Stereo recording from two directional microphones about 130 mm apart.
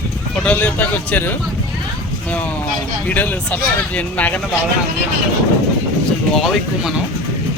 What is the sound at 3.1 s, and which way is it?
Speech, 15° left (ahead or behind).